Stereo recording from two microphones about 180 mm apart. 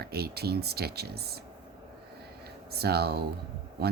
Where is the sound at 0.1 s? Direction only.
60° right (ahead or behind).